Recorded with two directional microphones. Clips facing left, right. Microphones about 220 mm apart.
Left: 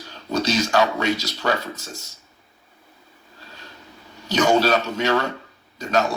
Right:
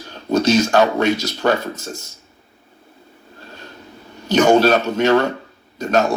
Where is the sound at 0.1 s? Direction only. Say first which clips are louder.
Right 7 dB; 50° right (ahead or behind).